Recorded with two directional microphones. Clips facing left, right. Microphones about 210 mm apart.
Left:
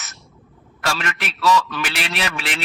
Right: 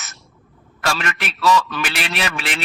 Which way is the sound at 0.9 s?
55° right (ahead or behind).